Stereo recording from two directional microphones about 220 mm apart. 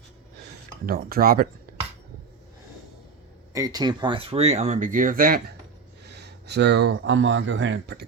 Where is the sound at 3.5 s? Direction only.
15° right (ahead or behind); by 5.6 s 40° right (ahead or behind).